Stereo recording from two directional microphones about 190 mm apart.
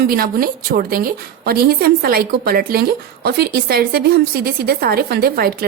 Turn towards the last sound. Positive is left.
turn(degrees=-50)  # may be behind; listen again after turning